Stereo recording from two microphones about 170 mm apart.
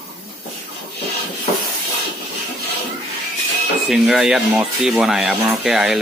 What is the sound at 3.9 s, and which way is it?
Speech, centre (ahead or behind).